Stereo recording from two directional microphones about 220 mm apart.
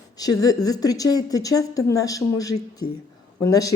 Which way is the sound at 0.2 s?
15° left (ahead or behind).